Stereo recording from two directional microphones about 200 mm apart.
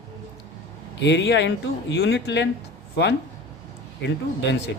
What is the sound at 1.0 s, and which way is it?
Speech, 60° left (ahead or behind).